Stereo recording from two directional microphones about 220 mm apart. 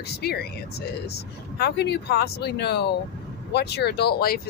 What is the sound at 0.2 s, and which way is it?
Speech, 45° left (ahead or behind).